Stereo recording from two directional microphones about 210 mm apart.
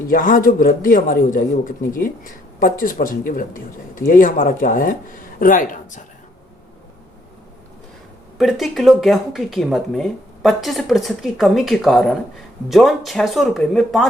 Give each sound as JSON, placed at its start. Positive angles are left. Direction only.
{"t": 0.1, "sound": "a man's voice", "side_deg": 40}
{"t": 8.4, "sound": "speech", "side_deg": 0}